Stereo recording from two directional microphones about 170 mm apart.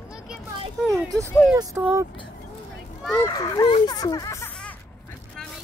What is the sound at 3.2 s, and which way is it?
Speech, 20° left (ahead or behind).